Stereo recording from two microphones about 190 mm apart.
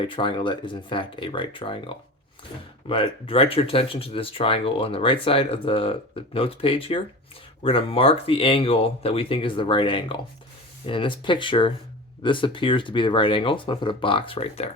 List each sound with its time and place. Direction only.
0.0 s speech: 25° left (ahead or behind)
2.9 s speech: 30° left (ahead or behind)